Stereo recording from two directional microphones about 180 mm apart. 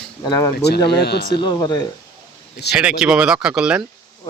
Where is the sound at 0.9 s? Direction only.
65° left (ahead or behind).